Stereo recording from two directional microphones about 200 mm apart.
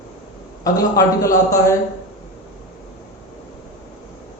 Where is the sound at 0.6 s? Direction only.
15° left (ahead or behind).